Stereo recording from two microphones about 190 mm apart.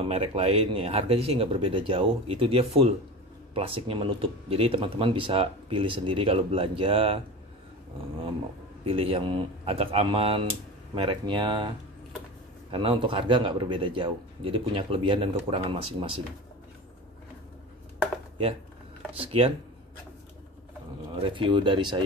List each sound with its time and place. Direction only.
0.0 s speech: 30° right (ahead or behind)
8.8 s speech: 30° right (ahead or behind)
12.7 s speech: 25° right (ahead or behind)
19.1 s speech: 30° right (ahead or behind)
21.1 s speech: 25° right (ahead or behind)